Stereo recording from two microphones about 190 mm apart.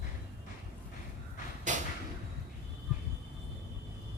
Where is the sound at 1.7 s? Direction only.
40° right (ahead or behind).